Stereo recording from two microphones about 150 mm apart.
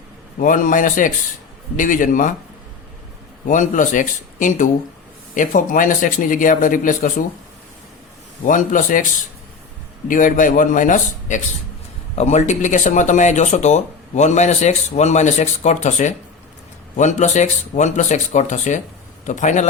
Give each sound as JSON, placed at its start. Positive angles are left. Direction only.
{"t": 0.3, "sound": "speech", "side_deg": 60}
{"t": 3.4, "sound": "speech", "side_deg": 60}
{"t": 8.4, "sound": "speech", "side_deg": 60}
{"t": 10.1, "sound": "speech", "side_deg": 60}